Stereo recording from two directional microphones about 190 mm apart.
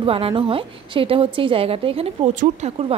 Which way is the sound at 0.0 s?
30° right (ahead or behind).